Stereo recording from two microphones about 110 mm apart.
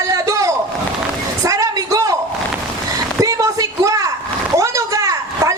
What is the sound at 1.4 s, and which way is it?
Vehicle, 30° right (ahead or behind).